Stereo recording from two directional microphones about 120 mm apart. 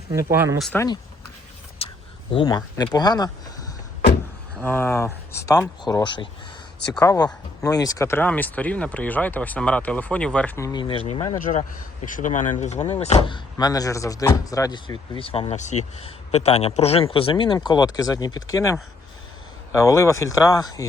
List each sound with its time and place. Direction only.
0.1 s speech: 20° right (ahead or behind)
1.8 s a sound: 55° left (ahead or behind)
2.3 s speech: 40° left (ahead or behind)
4.6 s speech: 15° left (ahead or behind); by 6.2 s 40° left (ahead or behind)
7.6 s speech: 30° left (ahead or behind); by 10.6 s 10° left (ahead or behind)
10.6 s speech: 35° left (ahead or behind); by 11.2 s 50° left (ahead or behind)
11.3 s speech: 90° left; by 13.2 s 65° left (ahead or behind)
13.2 s speech: 40° left (ahead or behind)